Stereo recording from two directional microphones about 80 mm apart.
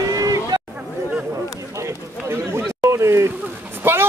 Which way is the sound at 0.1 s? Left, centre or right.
Right.